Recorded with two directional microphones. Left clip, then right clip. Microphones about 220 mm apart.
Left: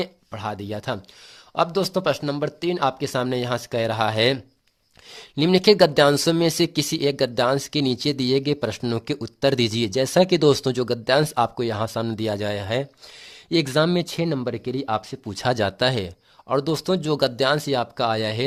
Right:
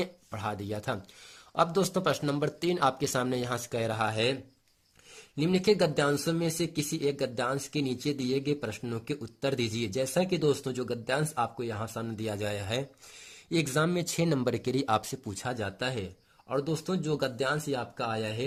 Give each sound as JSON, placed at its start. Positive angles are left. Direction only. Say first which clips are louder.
{"t": 0.0, "sound": "speech", "louder": "left 5 dB", "side_deg": 15}
{"t": 15.4, "sound": "speech", "louder": "left 13 dB", "side_deg": 30}